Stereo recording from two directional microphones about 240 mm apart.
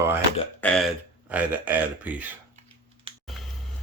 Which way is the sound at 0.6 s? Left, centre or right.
Centre.